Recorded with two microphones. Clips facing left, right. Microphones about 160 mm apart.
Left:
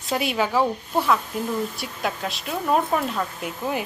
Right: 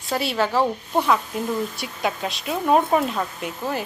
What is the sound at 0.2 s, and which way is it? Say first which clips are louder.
Speech: right 1 dB; 10° left (ahead or behind).